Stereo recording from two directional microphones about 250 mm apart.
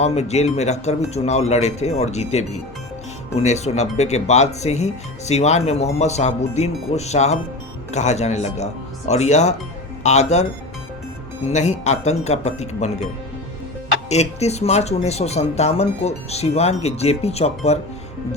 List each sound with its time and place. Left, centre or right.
0.0 s speech: left
11.4 s speech: left
14.1 s speech: left